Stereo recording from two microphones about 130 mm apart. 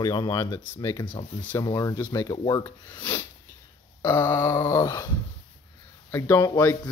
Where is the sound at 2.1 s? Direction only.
30° left (ahead or behind).